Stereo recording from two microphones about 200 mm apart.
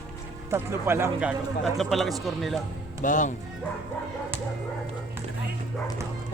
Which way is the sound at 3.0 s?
40° left (ahead or behind).